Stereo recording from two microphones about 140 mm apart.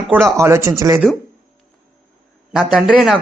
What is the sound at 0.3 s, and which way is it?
Speech, 20° right (ahead or behind).